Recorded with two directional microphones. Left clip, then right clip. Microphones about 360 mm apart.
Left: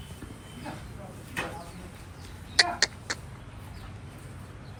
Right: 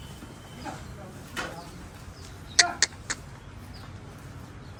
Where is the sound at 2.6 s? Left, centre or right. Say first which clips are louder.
Right 1 dB; centre.